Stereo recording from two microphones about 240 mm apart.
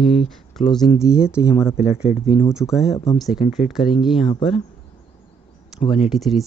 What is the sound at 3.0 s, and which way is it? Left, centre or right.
Speech, centre.